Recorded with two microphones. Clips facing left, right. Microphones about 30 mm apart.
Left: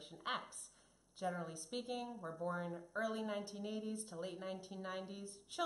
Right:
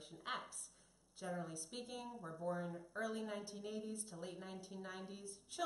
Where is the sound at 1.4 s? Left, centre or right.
Centre.